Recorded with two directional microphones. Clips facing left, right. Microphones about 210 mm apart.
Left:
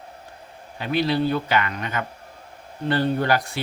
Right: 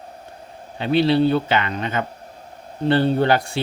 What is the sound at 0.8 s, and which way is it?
A man's voice, 30° right (ahead or behind).